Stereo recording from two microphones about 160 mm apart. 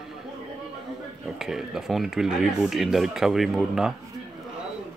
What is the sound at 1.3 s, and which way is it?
Speech, 5° right (ahead or behind).